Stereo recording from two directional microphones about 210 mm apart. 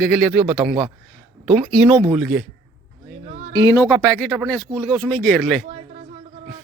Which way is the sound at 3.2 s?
35° right (ahead or behind).